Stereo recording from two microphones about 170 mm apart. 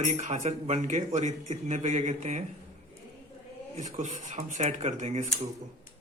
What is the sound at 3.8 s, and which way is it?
Speech, 45° right (ahead or behind).